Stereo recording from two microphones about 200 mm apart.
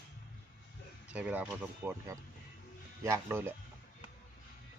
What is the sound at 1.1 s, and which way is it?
Speech, 5° right (ahead or behind).